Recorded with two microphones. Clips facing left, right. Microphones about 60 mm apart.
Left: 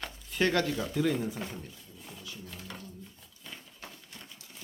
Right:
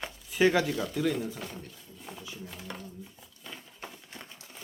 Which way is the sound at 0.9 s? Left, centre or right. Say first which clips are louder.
Left 1 dB; centre.